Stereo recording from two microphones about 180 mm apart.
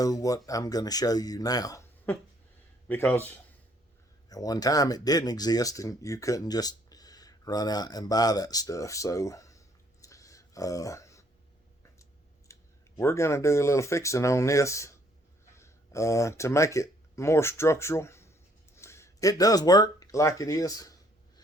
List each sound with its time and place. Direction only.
0.0 s speech: 20° left (ahead or behind)
12.5 s clicking: 15° left (ahead or behind)
13.0 s speech: 15° left (ahead or behind)